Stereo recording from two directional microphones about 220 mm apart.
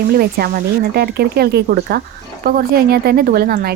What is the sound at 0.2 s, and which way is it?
A woman's voice, 45° right (ahead or behind).